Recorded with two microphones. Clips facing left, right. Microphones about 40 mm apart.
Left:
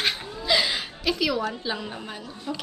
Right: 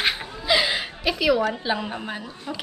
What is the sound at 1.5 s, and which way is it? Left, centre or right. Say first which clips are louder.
A woman's voice: right 5 dB; right.